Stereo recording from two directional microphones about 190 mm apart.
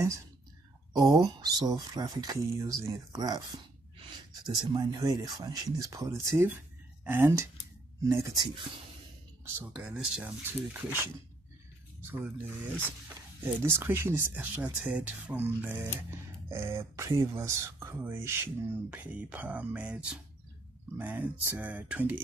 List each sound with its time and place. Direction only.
0.9 s speech: 20° right (ahead or behind)
9.6 s speech: 5° right (ahead or behind)
12.0 s speech: 10° right (ahead or behind)
21.0 s speech: 10° right (ahead or behind)